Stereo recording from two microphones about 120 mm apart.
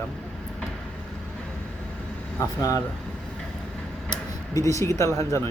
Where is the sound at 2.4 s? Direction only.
30° left (ahead or behind).